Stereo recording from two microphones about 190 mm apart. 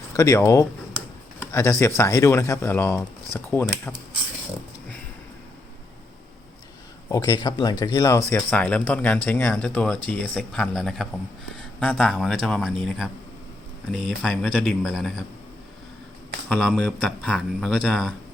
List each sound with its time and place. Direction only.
0.2 s speech: 15° left (ahead or behind)
7.1 s speech: 20° left (ahead or behind); by 15.2 s centre (ahead or behind)
16.5 s speech: centre (ahead or behind)